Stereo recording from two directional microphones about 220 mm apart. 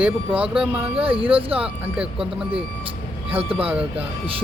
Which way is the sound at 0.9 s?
25° right (ahead or behind).